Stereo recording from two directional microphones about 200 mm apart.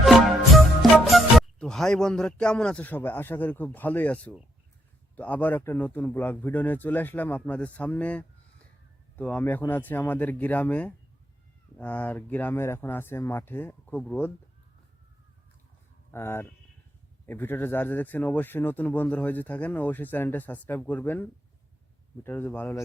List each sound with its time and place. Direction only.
0.0 s music: centre (ahead or behind)
5.1 s speech: 10° left (ahead or behind)
16.1 s speech: 10° left (ahead or behind)